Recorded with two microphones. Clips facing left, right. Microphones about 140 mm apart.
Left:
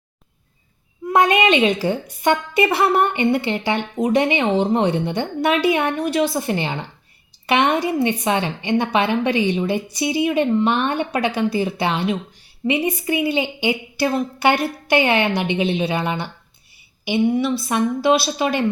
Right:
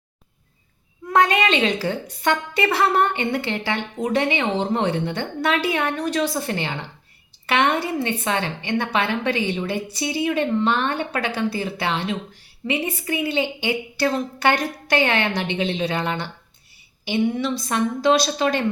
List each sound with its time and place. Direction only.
1.1 s a woman's voice: 15° left (ahead or behind)